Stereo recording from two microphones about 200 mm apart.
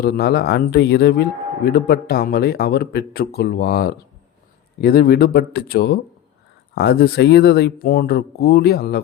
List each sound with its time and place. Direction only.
0.0 s speech: 50° left (ahead or behind)